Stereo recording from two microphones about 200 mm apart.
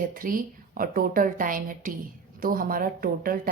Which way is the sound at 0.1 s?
45° right (ahead or behind).